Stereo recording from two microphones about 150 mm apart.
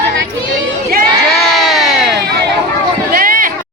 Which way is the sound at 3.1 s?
70° right (ahead or behind).